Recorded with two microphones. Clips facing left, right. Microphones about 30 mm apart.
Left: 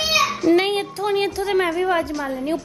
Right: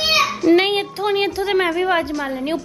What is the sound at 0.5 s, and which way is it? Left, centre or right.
A woman's voice, right.